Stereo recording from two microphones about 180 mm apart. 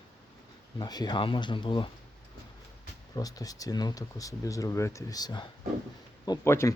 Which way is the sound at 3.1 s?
20° left (ahead or behind).